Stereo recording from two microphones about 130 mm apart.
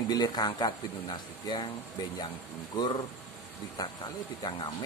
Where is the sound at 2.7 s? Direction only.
35° left (ahead or behind).